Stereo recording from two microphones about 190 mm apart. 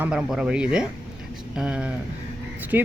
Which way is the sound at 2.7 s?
10° right (ahead or behind).